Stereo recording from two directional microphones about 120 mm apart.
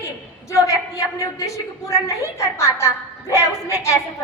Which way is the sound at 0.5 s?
25° left (ahead or behind).